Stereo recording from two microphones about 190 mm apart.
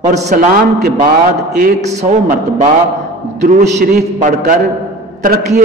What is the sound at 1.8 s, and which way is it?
Speech, 35° right (ahead or behind).